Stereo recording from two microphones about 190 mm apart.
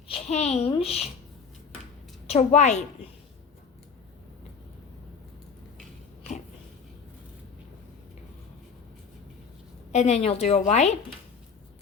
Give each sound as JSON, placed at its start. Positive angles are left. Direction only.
{"t": 0.1, "sound": "a child's voice", "side_deg": 35}
{"t": 2.2, "sound": "a child's voice", "side_deg": 35}
{"t": 9.9, "sound": "a child's voice", "side_deg": 35}